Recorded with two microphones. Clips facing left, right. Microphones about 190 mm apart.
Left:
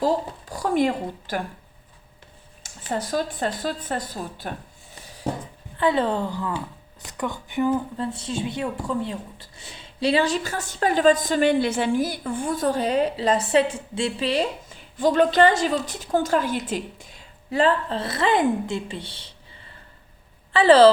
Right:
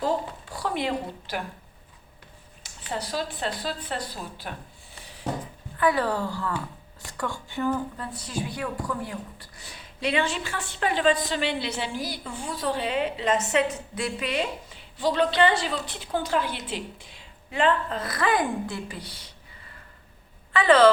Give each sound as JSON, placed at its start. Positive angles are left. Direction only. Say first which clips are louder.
{"t": 0.0, "sound": "speech", "louder": "left 4 dB", "side_deg": 40}
{"t": 2.6, "sound": "speech", "louder": "left 5 dB", "side_deg": 45}
{"t": 5.7, "sound": "a woman's voice", "louder": "left 2 dB", "side_deg": 25}
{"t": 14.7, "sound": "a woman's voice", "louder": "left 5 dB", "side_deg": 50}
{"t": 20.5, "sound": "speech", "louder": "left 4 dB", "side_deg": 30}